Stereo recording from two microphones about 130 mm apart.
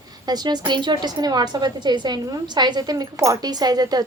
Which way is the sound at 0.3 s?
30° right (ahead or behind).